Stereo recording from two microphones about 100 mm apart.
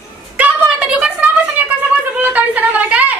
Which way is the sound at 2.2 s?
15° right (ahead or behind).